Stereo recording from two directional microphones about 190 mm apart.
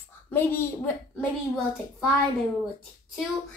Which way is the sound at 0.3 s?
10° left (ahead or behind).